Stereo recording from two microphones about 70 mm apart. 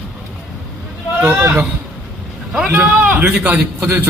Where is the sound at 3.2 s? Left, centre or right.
Right.